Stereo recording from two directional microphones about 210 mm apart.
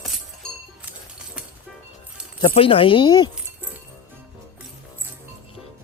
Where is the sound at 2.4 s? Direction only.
25° left (ahead or behind).